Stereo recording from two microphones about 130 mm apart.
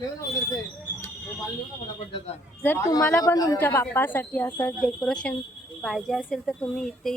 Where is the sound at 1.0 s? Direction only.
5° left (ahead or behind).